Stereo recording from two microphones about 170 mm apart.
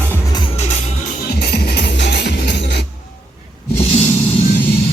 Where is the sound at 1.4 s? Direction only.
75° left (ahead or behind).